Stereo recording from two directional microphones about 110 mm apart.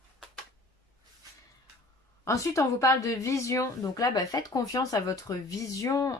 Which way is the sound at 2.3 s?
30° left (ahead or behind).